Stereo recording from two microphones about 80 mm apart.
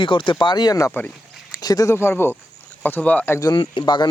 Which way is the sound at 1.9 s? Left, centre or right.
Left.